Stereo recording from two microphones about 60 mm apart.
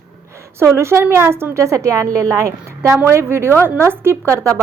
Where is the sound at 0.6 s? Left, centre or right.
Right.